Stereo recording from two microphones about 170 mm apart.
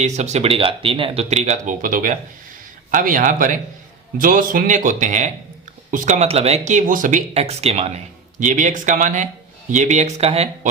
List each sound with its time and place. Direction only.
0.0 s speech: 40° right (ahead or behind)